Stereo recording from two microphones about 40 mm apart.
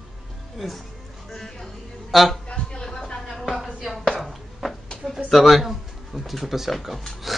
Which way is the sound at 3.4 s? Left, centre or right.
Centre.